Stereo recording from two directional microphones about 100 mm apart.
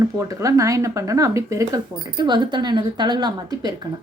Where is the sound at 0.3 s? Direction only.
35° right (ahead or behind).